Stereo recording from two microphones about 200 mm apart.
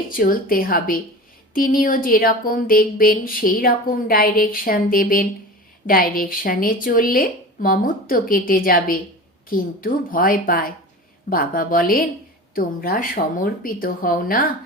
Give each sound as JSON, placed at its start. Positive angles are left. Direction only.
{"t": 0.1, "sound": "speech", "side_deg": 45}